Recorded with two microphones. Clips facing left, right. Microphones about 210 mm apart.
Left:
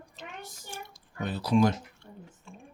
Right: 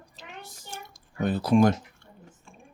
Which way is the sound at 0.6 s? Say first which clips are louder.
Even; 45° right (ahead or behind).